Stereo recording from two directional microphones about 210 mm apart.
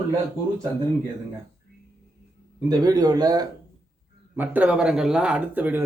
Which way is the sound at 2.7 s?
20° right (ahead or behind).